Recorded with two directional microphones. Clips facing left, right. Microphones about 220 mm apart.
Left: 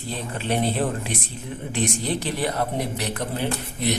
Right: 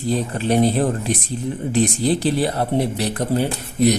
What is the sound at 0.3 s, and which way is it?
Speech, 40° right (ahead or behind).